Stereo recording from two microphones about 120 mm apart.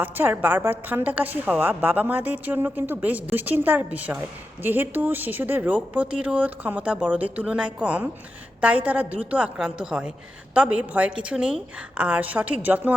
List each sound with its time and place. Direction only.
0.0 s a woman's voice: 15° right (ahead or behind)